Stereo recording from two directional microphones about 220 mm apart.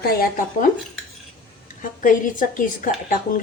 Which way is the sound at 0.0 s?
40° left (ahead or behind).